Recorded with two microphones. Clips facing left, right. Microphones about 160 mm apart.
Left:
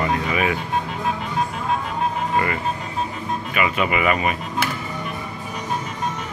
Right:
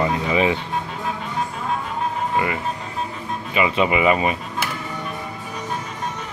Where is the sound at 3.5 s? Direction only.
25° right (ahead or behind).